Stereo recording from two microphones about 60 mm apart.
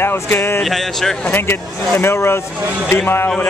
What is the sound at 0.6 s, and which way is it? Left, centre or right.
Speech, centre.